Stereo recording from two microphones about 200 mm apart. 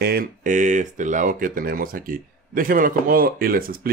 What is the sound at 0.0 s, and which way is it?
Speech, 50° right (ahead or behind).